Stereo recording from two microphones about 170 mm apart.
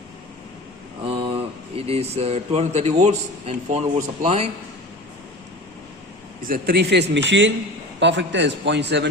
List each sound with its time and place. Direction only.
1.0 s a sound: 30° right (ahead or behind)
1.7 s a man's voice: 35° right (ahead or behind)
6.5 s a man's voice: 70° right (ahead or behind); by 9.0 s 90° right